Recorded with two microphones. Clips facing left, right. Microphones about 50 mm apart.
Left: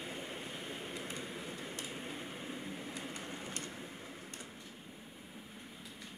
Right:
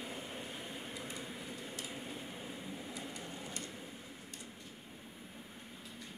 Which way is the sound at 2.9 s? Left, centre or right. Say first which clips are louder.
Left 1 dB; left.